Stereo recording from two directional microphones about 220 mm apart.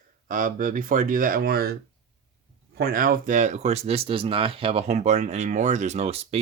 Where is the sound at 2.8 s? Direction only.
40° right (ahead or behind).